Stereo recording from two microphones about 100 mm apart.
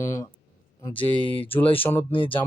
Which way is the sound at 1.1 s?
60° left (ahead or behind).